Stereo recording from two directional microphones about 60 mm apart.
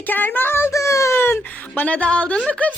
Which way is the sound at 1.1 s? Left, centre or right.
Left.